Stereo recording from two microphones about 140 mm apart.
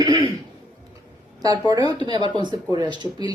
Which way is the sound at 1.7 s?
30° right (ahead or behind).